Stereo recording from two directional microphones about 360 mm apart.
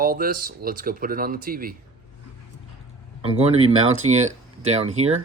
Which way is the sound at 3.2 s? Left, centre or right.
Centre.